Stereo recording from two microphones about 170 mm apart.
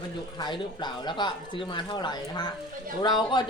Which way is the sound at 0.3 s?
25° left (ahead or behind).